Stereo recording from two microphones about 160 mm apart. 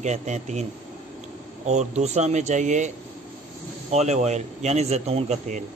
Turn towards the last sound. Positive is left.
turn(degrees=-45)  # may be behind; listen again after turning